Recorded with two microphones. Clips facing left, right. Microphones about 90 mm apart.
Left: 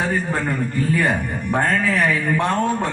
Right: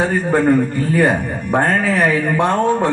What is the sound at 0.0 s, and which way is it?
Speech, 40° right (ahead or behind).